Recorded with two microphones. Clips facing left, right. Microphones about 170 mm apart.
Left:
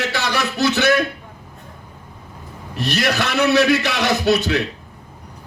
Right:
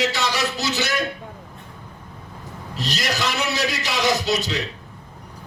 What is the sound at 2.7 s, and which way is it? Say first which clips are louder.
A man's voice: left 6 dB; 60° left (ahead or behind).